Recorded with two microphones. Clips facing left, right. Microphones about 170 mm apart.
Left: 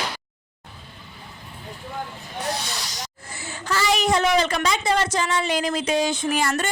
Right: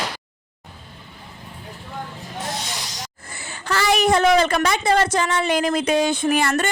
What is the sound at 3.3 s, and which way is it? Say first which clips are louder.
A woman's voice: right 2 dB; 60° right (ahead or behind).